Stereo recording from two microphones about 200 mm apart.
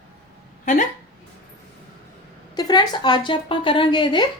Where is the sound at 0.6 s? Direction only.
40° left (ahead or behind).